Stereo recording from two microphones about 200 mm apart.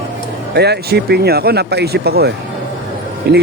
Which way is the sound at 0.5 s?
55° right (ahead or behind).